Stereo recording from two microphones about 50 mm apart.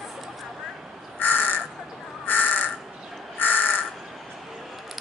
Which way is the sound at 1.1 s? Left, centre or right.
Left.